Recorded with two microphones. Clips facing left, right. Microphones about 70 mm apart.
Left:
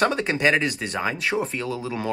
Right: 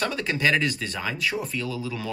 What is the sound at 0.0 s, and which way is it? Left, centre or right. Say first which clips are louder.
Speech: left 4 dB; left.